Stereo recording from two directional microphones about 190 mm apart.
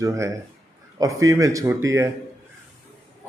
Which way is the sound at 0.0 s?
15° right (ahead or behind).